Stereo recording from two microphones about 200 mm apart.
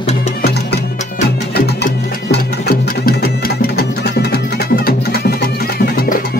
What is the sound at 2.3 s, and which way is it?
Music, 50° left (ahead or behind).